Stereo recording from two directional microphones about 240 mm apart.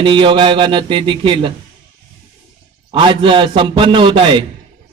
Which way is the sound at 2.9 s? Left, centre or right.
Centre.